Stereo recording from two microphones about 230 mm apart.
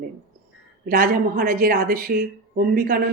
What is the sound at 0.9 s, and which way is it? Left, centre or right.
Speech, right.